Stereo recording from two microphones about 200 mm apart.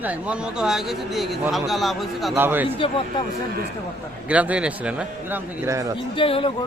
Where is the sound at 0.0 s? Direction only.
5° right (ahead or behind).